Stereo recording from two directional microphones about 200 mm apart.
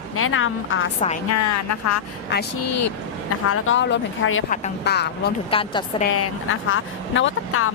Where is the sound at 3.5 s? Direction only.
90° left; by 4.4 s 70° left (ahead or behind).